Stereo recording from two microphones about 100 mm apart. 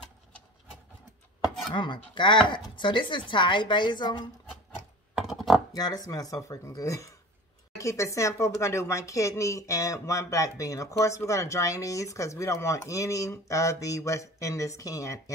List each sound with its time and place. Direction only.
1.7 s speech: 50° left (ahead or behind)
5.1 s a sound: 5° right (ahead or behind)
5.8 s speech: 40° left (ahead or behind)